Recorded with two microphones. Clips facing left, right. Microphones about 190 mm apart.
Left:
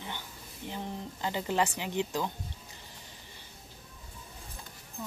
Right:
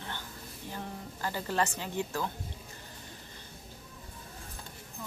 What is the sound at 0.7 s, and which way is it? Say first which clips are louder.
Speech: left 3 dB; 20° left (ahead or behind).